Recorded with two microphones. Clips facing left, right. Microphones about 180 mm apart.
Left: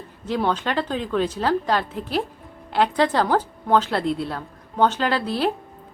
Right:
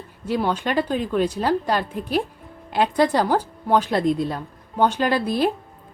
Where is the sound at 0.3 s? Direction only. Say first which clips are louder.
Right 1 dB; 10° right (ahead or behind).